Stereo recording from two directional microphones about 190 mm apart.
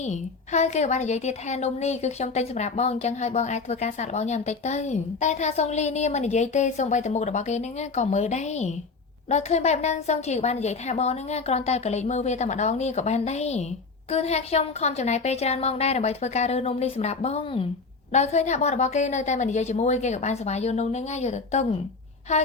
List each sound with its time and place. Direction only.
0.0 s a woman's voice: 35° left (ahead or behind)